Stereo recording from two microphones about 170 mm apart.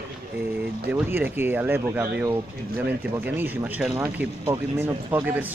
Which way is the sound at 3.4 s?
10° right (ahead or behind).